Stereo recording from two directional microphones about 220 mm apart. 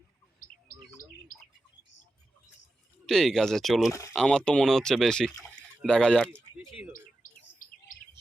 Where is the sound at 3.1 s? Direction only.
Centre (ahead or behind).